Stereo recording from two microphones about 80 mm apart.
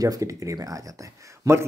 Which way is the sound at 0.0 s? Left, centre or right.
Right.